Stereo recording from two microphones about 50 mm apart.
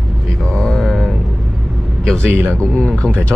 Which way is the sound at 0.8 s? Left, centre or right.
Centre.